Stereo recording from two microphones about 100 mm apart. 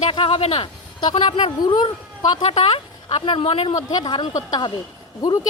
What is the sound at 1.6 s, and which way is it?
Speech, 45° left (ahead or behind).